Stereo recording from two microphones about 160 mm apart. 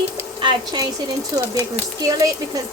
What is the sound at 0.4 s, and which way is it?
Speech, 25° right (ahead or behind).